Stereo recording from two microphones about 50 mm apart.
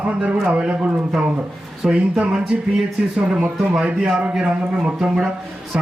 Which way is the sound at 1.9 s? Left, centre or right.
Centre.